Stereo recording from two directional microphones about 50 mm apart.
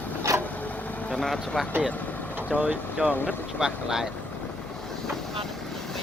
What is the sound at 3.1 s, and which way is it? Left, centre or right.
Speech, left.